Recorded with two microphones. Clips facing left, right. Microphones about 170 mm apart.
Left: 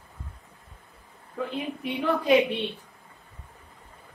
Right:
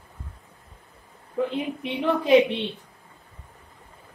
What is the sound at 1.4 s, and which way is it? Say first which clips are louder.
Speech: right 6 dB; 15° right (ahead or behind).